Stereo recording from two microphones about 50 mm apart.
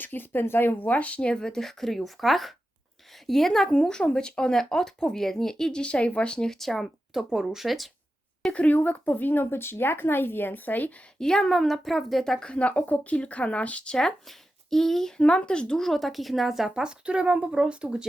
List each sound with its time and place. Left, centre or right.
0.0 s speech: left
0.9 s speech: left; by 6.9 s centre
7.1 s a woman's voice: centre
8.4 s speech: left
11.2 s a woman's voice: centre
12.4 s speech: left
14.3 s speech: centre
15.2 s speech: left; by 18.0 s right